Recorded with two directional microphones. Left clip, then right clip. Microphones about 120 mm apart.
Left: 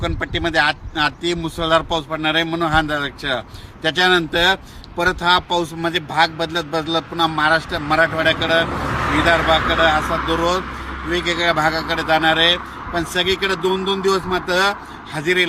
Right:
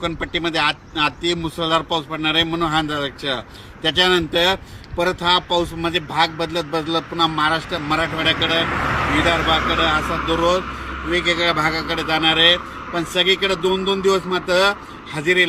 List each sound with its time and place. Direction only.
0.0 s speech: 15° left (ahead or behind)
8.8 s a sound: 80° right
9.2 s speech: 5° left (ahead or behind)
11.3 s speech: 5° left (ahead or behind)